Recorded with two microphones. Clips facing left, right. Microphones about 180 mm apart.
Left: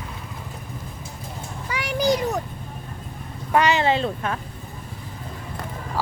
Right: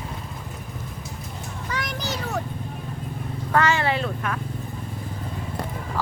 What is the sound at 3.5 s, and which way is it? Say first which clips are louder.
Speech: left 3 dB; 15° left (ahead or behind).